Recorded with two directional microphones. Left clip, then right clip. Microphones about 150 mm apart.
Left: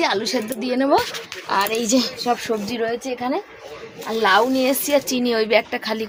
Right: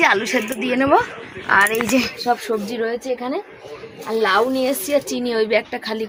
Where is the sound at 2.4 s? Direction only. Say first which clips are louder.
Right 1 dB; 10° left (ahead or behind).